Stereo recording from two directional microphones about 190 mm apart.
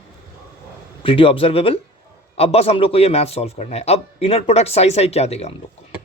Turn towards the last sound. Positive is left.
turn(degrees=35)  # may be behind; listen again after turning